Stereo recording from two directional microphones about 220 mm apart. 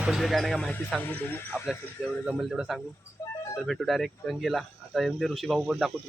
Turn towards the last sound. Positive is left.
turn(degrees=0)  # may be behind; listen again after turning